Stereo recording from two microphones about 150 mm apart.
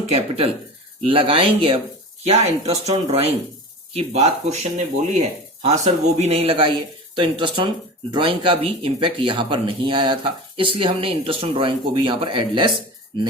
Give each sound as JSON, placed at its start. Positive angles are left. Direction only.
{"t": 0.1, "sound": "speech", "side_deg": -40}
{"t": 5.6, "sound": "speech", "side_deg": -45}